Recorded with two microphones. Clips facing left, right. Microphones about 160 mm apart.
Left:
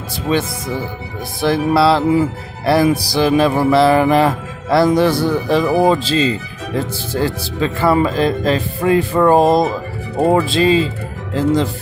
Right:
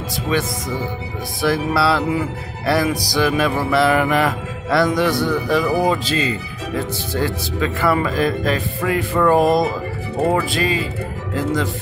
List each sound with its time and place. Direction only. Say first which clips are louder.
1.4 s music: left 4 dB; 25° left (ahead or behind)